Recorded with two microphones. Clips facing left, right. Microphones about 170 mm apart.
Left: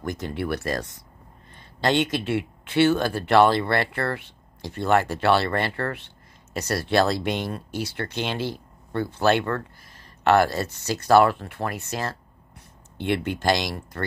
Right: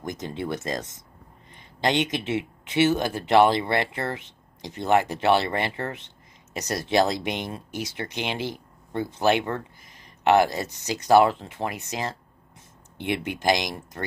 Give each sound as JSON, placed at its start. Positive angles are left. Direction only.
{"t": 0.0, "sound": "speech", "side_deg": -20}